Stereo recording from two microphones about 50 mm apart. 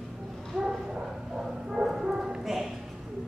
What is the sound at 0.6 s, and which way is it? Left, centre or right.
Bow-wow, centre.